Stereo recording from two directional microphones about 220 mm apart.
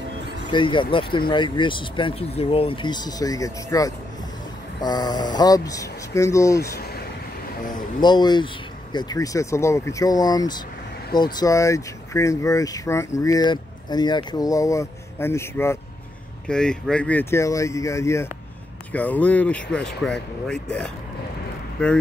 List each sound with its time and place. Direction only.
0.5 s speech: 20° left (ahead or behind)
8.0 s speech: 20° left (ahead or behind)